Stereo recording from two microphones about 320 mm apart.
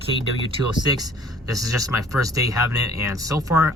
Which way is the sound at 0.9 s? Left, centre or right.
Centre.